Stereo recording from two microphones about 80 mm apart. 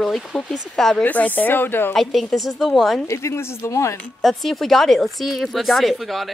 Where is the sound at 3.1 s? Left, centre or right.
Left.